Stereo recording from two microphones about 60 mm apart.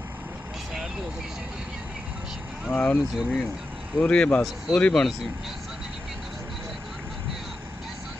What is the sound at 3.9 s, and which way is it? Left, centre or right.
Speech, centre.